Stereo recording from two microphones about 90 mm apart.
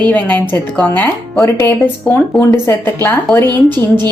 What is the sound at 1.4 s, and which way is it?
A woman's voice, 30° left (ahead or behind).